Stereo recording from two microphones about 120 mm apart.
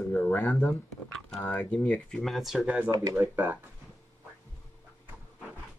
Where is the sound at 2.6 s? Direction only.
15° right (ahead or behind).